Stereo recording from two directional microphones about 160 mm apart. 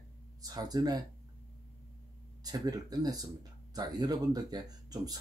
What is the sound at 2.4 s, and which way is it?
Speech, 25° right (ahead or behind).